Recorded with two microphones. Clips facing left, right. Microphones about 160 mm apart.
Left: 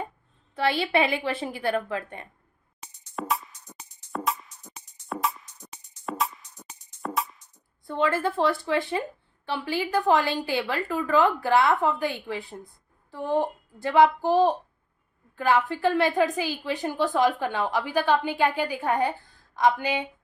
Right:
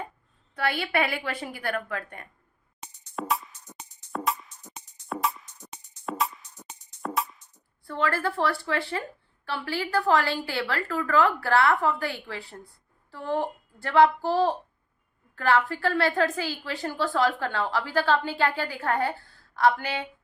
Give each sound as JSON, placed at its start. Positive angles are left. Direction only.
{"t": 0.5, "sound": "a woman's voice", "side_deg": 25}
{"t": 2.8, "sound": "music", "side_deg": 0}
{"t": 7.9, "sound": "a woman's voice", "side_deg": 20}